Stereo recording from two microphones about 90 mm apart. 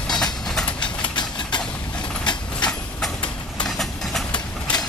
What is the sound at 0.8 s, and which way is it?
Engine, 60° left (ahead or behind).